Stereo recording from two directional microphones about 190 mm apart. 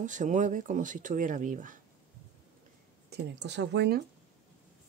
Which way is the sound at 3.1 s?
60° right (ahead or behind).